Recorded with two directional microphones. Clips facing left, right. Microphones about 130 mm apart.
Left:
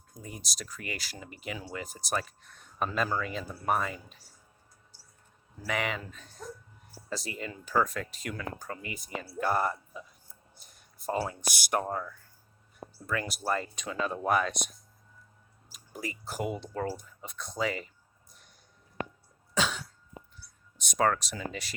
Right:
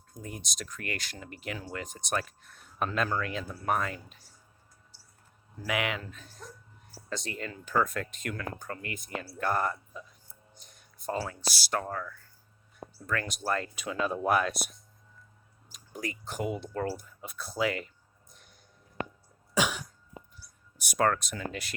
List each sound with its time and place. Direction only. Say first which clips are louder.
0.1 s speech: right 2 dB; centre (ahead or behind)
5.6 s speech: right 1 dB; centre (ahead or behind)
10.6 s a sound: right 1 dB; 5° left (ahead or behind)
11.2 s speech: left 2 dB; 15° left (ahead or behind)
13.1 s speech: even; 10° left (ahead or behind)
13.7 s speech: right 2 dB; 5° right (ahead or behind)
19.5 s cough: right 2 dB; 15° right (ahead or behind)
20.7 s a sound: right 1 dB; 10° right (ahead or behind)
21.0 s speech: even; centre (ahead or behind)